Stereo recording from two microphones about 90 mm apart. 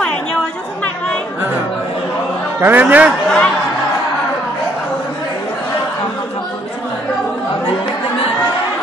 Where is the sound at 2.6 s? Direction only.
20° right (ahead or behind).